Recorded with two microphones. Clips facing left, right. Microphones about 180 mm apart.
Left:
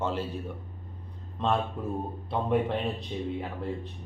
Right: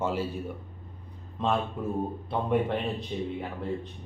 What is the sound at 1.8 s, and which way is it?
A man's voice, centre (ahead or behind).